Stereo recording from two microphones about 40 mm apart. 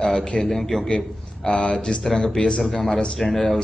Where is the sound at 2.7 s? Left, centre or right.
Centre.